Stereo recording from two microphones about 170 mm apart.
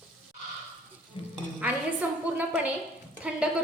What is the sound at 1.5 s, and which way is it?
A woman's voice, 10° right (ahead or behind).